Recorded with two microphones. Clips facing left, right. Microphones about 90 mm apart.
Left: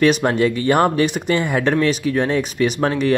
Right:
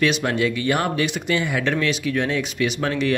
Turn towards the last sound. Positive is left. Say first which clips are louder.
# left 4 dB
turn(degrees=40)  # may be behind; listen again after turning